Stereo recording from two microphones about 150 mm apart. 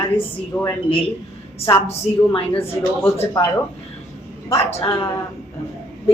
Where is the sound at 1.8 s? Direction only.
40° left (ahead or behind).